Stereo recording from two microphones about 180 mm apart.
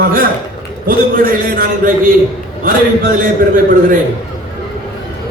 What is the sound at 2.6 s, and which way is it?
Speech, 50° right (ahead or behind).